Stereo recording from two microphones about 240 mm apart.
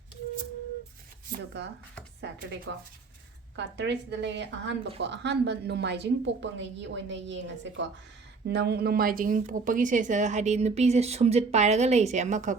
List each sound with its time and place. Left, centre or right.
2.7 s a woman's voice: right